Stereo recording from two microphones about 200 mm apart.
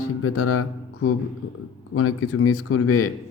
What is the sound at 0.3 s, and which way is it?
Music, 90° left.